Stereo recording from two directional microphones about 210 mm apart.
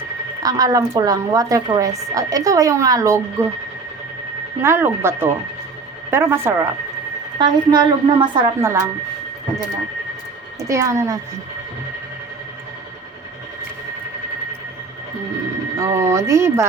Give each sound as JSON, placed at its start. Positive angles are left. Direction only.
{"t": 0.4, "sound": "a woman's voice", "side_deg": -15}
{"t": 4.6, "sound": "a woman's voice", "side_deg": -10}
{"t": 10.7, "sound": "a woman's voice", "side_deg": -15}
{"t": 15.8, "sound": "a woman's voice", "side_deg": -15}